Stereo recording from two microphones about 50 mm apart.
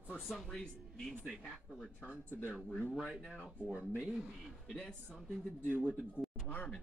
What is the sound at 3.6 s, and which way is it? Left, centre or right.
Speech, right.